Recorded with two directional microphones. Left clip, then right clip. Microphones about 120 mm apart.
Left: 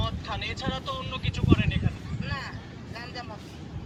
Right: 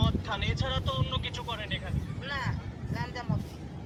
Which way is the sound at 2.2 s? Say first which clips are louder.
Right 1 dB; 35° left (ahead or behind).